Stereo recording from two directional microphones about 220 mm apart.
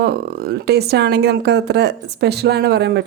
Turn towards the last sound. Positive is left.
turn(degrees=-50)  # may be behind; listen again after turning